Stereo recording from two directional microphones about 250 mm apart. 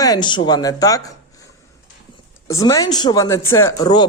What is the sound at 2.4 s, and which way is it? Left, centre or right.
A man's voice, centre.